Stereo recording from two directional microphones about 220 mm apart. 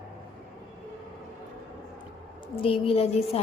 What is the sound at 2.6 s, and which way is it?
Speech, 25° left (ahead or behind).